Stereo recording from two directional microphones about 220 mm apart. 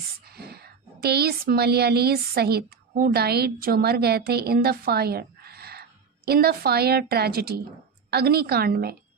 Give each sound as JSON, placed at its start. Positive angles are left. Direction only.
{"t": 0.3, "sound": "a woman's voice", "side_deg": -45}